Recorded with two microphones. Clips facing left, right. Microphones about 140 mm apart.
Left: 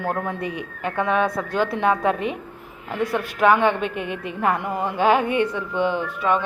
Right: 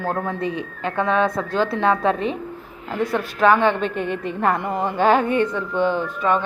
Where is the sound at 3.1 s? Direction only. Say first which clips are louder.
Right 1 dB; 15° left (ahead or behind).